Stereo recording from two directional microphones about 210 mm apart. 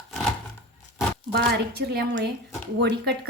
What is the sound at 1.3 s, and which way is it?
A woman's voice, 55° right (ahead or behind).